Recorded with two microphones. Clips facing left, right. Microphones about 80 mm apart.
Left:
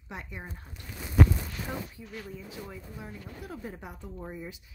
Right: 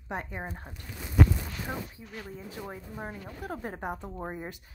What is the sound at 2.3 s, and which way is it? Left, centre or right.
Speech, right.